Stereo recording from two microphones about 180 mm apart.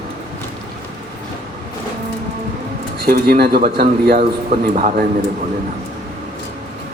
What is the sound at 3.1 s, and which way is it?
A man's voice, 55° right (ahead or behind).